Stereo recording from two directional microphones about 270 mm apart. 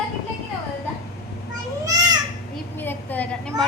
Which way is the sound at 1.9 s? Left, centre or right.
Centre.